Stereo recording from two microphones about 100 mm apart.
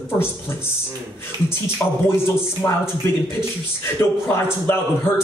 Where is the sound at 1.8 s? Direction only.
30° left (ahead or behind).